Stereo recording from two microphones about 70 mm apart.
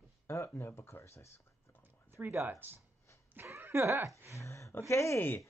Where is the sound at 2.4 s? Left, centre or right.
Right.